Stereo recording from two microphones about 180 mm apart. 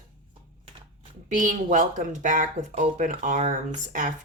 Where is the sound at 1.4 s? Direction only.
45° right (ahead or behind).